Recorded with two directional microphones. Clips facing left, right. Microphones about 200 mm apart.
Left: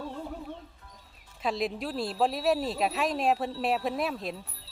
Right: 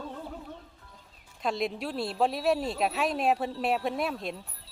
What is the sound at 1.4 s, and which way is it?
Speech, centre (ahead or behind).